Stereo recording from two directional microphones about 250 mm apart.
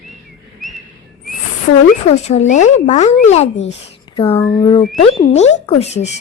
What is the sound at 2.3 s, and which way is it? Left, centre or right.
Speech, left.